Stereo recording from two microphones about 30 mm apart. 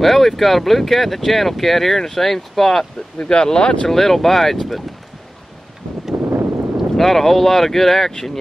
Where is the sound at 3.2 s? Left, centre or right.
Left.